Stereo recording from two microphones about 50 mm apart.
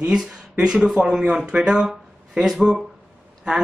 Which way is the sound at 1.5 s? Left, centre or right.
Centre.